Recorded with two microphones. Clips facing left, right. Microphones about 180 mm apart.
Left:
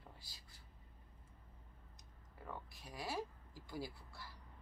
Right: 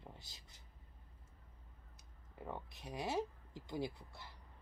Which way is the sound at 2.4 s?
20° right (ahead or behind).